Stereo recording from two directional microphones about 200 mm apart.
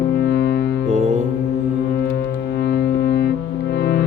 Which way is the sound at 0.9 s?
35° right (ahead or behind).